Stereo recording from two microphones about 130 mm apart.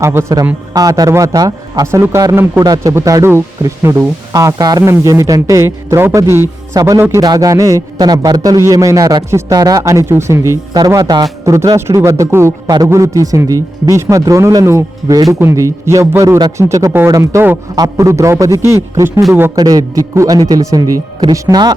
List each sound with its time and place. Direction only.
0.0 s a man's voice: 20° right (ahead or behind)
19.5 s a man's voice: 30° right (ahead or behind)